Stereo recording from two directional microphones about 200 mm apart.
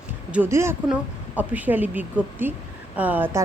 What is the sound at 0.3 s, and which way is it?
A woman's voice, 10° right (ahead or behind).